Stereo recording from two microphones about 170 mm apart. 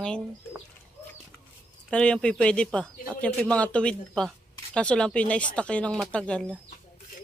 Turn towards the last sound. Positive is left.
turn(degrees=5)  # may be behind; listen again after turning